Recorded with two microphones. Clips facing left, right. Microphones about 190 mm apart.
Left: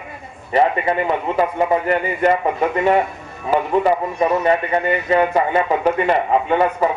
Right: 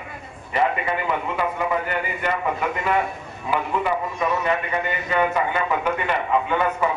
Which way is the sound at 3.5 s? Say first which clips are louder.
Left 7 dB; 40° left (ahead or behind).